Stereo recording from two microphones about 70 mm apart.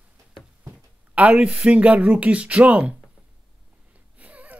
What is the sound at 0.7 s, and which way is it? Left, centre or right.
Speech, right.